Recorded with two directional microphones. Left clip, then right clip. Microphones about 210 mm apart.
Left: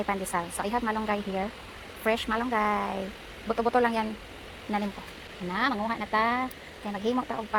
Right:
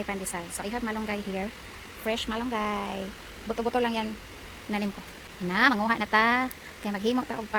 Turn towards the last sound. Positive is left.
turn(degrees=-20)  # may be behind; listen again after turning